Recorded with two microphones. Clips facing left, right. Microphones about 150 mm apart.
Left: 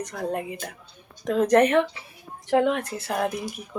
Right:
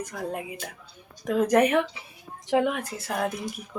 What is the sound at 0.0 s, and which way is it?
Speech, 5° right (ahead or behind).